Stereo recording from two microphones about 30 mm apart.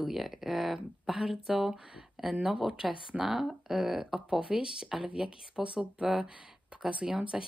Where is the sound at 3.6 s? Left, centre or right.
Centre.